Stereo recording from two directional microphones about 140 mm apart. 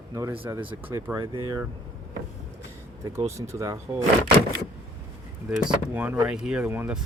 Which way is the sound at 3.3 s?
20° right (ahead or behind).